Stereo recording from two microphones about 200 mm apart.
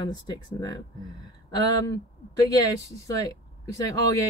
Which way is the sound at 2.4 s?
15° left (ahead or behind).